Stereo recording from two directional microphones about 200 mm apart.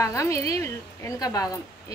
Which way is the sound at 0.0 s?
15° left (ahead or behind).